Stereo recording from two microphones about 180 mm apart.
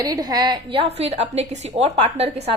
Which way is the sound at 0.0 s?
20° right (ahead or behind).